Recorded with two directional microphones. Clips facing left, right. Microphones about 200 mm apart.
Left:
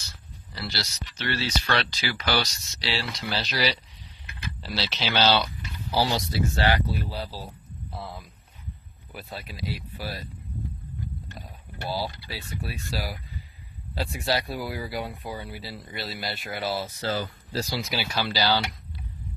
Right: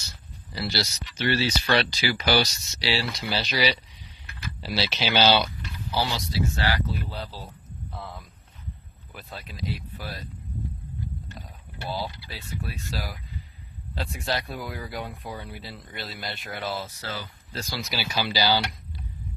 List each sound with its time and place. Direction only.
0.5 s speech: 10° right (ahead or behind)
5.9 s speech: 35° left (ahead or behind)
6.7 s speech: 20° left (ahead or behind)
7.1 s speech: 10° left (ahead or behind)
11.9 s speech: 5° left (ahead or behind)
17.1 s speech: 35° left (ahead or behind)
17.7 s speech: centre (ahead or behind)